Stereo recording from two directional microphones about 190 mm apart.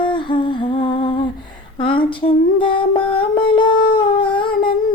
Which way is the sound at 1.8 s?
25° left (ahead or behind).